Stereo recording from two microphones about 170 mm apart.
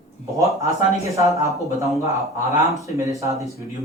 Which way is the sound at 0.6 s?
20° right (ahead or behind).